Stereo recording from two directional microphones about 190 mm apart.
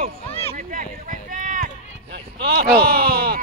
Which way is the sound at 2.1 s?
55° right (ahead or behind).